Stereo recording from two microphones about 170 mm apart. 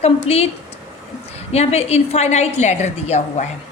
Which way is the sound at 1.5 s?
40° left (ahead or behind).